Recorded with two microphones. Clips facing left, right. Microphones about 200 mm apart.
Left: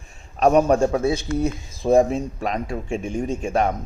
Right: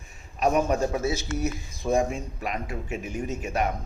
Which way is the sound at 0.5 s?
35° left (ahead or behind).